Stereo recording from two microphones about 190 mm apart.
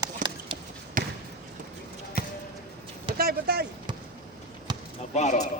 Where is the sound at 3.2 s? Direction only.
55° right (ahead or behind).